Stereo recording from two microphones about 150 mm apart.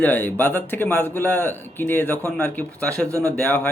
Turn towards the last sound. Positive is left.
turn(degrees=10)  # may be behind; listen again after turning